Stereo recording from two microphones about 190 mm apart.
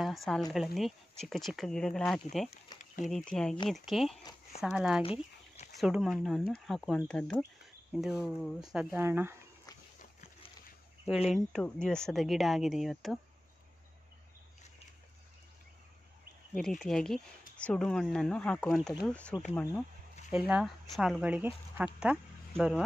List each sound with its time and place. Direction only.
0.0 s speech: centre (ahead or behind)
2.7 s a sound: 20° left (ahead or behind)
3.1 s speech: centre (ahead or behind)
8.7 s speech: 10° right (ahead or behind)
11.2 s speech: centre (ahead or behind)
16.5 s speech: 5° left (ahead or behind)
20.2 s speech: 5° right (ahead or behind)